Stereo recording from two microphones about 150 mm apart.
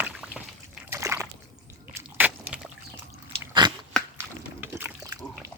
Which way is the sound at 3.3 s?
30° right (ahead or behind).